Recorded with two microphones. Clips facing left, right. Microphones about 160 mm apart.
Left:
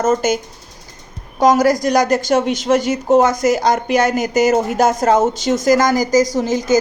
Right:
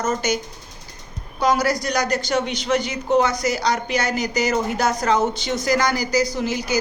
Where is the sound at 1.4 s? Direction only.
45° left (ahead or behind).